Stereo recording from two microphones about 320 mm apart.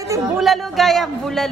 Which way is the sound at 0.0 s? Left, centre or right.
Centre.